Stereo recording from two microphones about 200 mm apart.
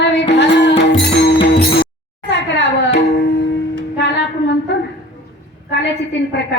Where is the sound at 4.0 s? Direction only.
60° left (ahead or behind).